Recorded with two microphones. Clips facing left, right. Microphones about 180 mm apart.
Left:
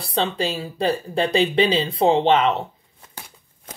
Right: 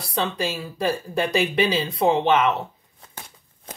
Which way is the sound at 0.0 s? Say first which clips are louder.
Left 2 dB; 25° left (ahead or behind).